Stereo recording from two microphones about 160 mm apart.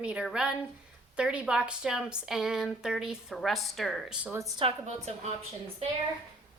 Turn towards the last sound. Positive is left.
turn(degrees=-40)  # may be behind; listen again after turning